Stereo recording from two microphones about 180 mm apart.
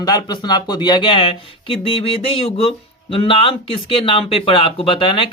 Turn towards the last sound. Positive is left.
turn(degrees=30)  # may be behind; listen again after turning